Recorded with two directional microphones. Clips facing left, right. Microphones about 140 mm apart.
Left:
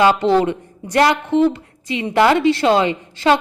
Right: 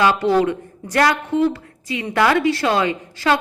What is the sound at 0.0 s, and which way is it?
A woman's voice, 25° left (ahead or behind).